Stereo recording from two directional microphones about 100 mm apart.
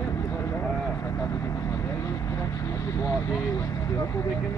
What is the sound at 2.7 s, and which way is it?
Vehicle, 35° left (ahead or behind).